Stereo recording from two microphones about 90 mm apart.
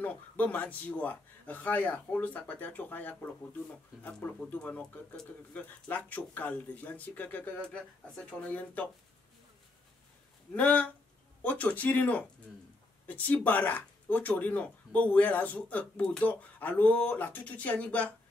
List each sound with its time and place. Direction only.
0.0 s speech: 15° left (ahead or behind)
10.5 s speech: 15° left (ahead or behind)